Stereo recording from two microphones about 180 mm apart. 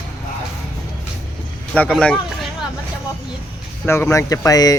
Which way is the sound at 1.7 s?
5° left (ahead or behind).